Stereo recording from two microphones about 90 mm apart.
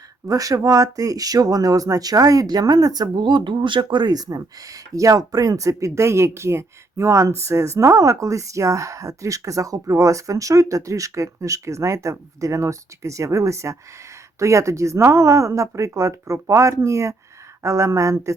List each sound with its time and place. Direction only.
0.3 s speech: 40° right (ahead or behind)